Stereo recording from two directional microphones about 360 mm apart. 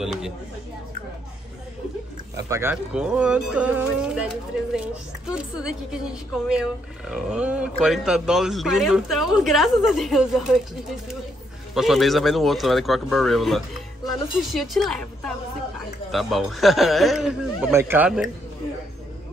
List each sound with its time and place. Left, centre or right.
0.0 s speech: centre
2.3 s speech: centre
11.7 s speech: centre